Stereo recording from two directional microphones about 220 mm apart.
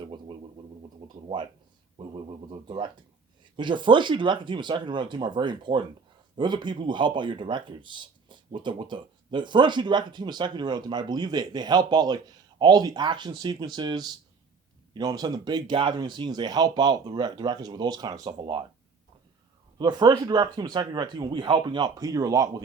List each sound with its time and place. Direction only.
0.0 s a sound: 25° right (ahead or behind)
2.0 s speech: 25° right (ahead or behind)
19.8 s speech: 20° right (ahead or behind)